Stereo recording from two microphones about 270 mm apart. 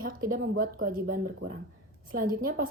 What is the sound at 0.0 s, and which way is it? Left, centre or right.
A woman's voice, right.